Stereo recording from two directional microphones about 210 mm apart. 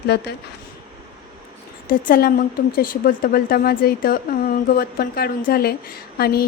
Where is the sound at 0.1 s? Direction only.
50° left (ahead or behind).